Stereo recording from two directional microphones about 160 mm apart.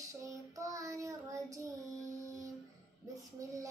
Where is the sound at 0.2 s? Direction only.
20° right (ahead or behind).